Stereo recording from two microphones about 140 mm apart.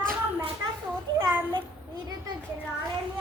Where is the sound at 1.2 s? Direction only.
15° right (ahead or behind).